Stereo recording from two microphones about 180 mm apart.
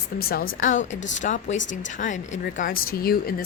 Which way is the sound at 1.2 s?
45° left (ahead or behind).